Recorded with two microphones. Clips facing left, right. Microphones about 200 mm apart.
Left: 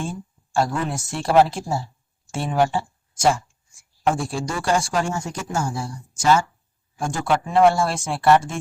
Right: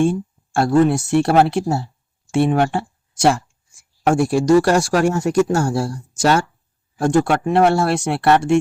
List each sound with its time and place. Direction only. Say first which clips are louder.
0.9 s speech: right 9 dB; 65° right (ahead or behind)